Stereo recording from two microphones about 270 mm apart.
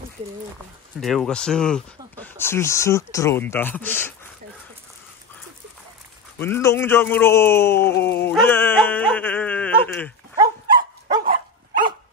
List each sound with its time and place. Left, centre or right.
1.0 s speech: centre
6.3 s speech: centre
10.3 s dog: centre
11.2 s dog: right